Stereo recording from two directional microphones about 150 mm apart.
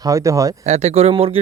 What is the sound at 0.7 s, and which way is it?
Speech, 45° right (ahead or behind).